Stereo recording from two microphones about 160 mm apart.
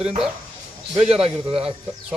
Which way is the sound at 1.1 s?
40° right (ahead or behind).